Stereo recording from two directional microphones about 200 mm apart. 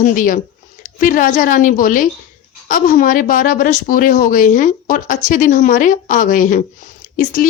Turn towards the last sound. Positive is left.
turn(degrees=45)  # may be behind; listen again after turning